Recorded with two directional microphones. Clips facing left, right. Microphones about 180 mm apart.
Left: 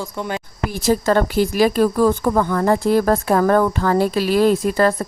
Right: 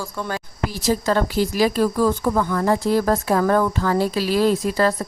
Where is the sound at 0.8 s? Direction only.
55° left (ahead or behind).